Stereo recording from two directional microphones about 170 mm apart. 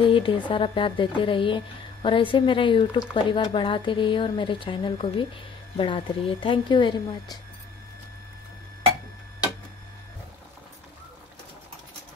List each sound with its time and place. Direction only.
0.0 s a woman's voice: 30° left (ahead or behind)